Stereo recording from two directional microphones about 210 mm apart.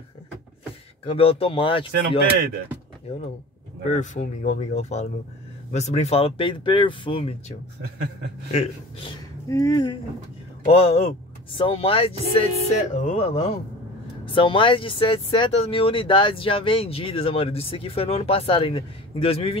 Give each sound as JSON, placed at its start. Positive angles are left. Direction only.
{"t": 1.0, "sound": "speech", "side_deg": 25}
{"t": 3.9, "sound": "speech", "side_deg": 35}
{"t": 9.5, "sound": "speech", "side_deg": 15}